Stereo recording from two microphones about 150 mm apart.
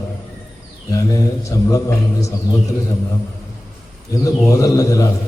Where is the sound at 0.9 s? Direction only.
20° left (ahead or behind).